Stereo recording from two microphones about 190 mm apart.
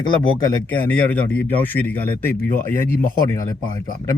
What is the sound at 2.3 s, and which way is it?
Speech, 50° left (ahead or behind).